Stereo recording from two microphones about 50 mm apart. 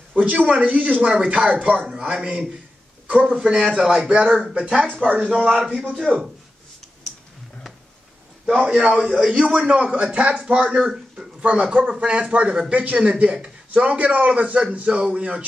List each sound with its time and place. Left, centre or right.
0.1 s a man's voice: right
1.9 s speech: centre
3.1 s speech: right
3.3 s a man's voice: centre
5.6 s speech: centre
6.1 s speech: centre
8.6 s a man's voice: centre